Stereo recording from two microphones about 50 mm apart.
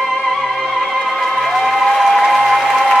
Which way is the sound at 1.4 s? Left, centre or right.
Centre.